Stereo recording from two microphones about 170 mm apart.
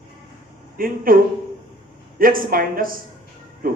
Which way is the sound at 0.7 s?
60° right (ahead or behind).